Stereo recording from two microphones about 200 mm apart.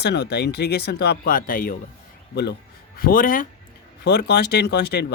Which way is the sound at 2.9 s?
45° left (ahead or behind).